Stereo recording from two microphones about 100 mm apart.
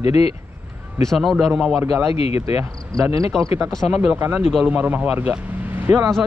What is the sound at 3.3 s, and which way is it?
Speech, 5° left (ahead or behind).